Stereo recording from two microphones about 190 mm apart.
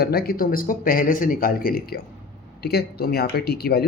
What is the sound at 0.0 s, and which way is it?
Speech, 55° left (ahead or behind).